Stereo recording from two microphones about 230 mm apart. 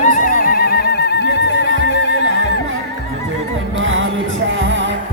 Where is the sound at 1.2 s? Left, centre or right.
Right.